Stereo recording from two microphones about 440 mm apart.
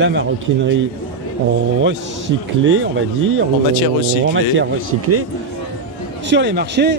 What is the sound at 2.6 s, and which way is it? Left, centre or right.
Speech, right.